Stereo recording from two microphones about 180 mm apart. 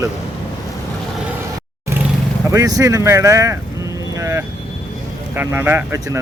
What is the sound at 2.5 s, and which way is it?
Speech, 20° right (ahead or behind).